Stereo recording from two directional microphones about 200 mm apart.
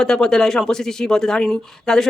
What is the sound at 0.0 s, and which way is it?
Speech, 5° left (ahead or behind).